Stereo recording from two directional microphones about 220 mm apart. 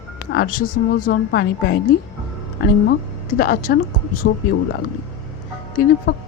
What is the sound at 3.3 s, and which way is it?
Speech, 40° left (ahead or behind).